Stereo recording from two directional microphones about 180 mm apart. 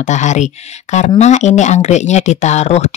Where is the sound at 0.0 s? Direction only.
40° left (ahead or behind).